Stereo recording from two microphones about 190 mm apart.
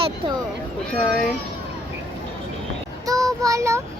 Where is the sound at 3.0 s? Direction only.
20° right (ahead or behind).